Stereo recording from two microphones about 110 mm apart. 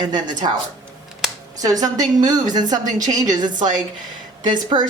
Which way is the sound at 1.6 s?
35° right (ahead or behind).